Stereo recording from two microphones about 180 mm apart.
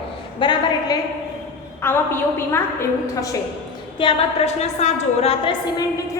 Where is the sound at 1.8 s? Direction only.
15° left (ahead or behind).